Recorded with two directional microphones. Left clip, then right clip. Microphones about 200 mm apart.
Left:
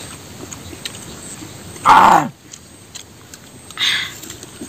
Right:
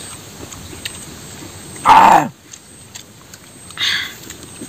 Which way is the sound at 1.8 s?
15° right (ahead or behind).